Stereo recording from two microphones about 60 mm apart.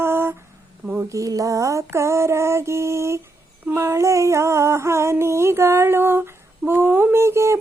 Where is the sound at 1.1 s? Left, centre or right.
Right.